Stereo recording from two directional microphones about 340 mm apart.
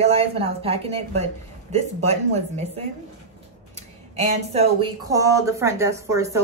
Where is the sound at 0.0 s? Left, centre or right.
Centre.